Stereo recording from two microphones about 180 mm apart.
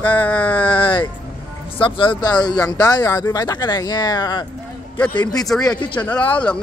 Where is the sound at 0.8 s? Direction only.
30° left (ahead or behind).